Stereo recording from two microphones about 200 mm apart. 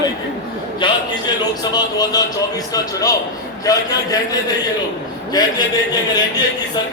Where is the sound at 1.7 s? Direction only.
20° left (ahead or behind).